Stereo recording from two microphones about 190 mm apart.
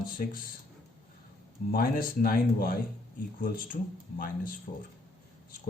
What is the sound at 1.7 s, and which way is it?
Speech, 50° left (ahead or behind).